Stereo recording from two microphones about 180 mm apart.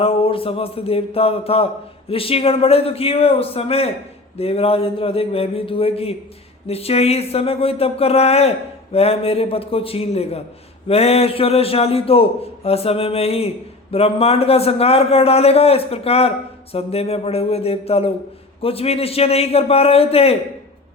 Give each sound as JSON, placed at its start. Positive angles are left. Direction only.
{"t": 0.0, "sound": "speech", "side_deg": 30}